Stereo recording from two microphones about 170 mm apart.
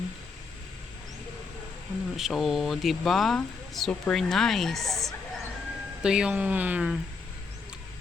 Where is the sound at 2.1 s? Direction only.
Centre (ahead or behind).